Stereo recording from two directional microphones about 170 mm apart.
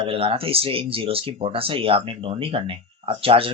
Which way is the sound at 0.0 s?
35° right (ahead or behind).